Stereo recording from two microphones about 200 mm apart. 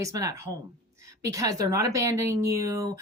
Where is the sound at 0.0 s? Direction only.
15° right (ahead or behind).